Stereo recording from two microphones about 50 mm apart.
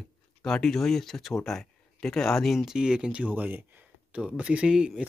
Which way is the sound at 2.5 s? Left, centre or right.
Centre.